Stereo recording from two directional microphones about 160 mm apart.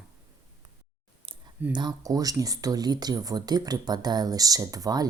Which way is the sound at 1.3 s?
35° right (ahead or behind).